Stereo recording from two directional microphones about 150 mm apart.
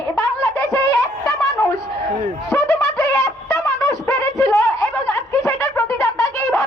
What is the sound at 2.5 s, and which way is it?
Wind instrument, 20° left (ahead or behind).